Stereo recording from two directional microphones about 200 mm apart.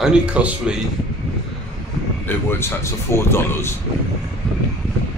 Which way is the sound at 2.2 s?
10° left (ahead or behind).